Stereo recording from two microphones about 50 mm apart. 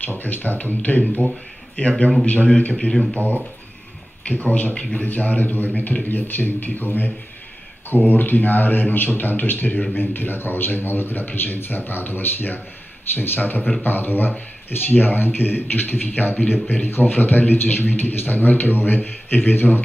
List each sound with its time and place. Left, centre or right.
0.2 s a man's voice: left
2.9 s speech: centre
4.2 s a man's voice: left